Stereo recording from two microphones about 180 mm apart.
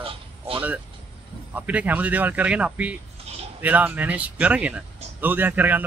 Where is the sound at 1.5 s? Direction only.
10° right (ahead or behind).